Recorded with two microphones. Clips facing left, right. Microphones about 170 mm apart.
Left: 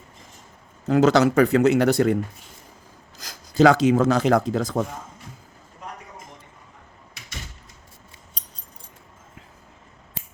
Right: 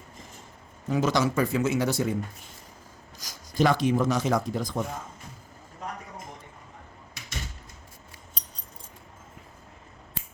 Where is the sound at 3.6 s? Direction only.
85° left.